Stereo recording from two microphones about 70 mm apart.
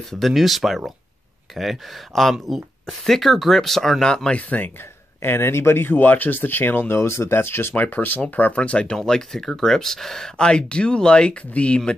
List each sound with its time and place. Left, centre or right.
0.1 s speech: centre; by 4.6 s left
5.2 s speech: left; by 11.9 s centre